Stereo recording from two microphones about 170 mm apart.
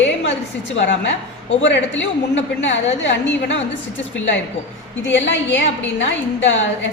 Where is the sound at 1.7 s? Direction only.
90° left.